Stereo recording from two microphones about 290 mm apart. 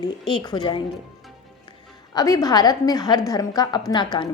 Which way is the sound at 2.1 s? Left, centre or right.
Centre.